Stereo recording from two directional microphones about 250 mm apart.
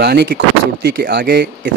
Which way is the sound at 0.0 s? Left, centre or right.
Right.